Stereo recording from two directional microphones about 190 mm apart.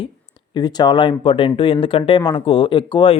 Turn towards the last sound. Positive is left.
turn(degrees=25)  # may be behind; listen again after turning